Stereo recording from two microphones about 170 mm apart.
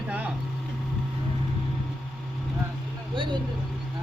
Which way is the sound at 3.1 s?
30° right (ahead or behind).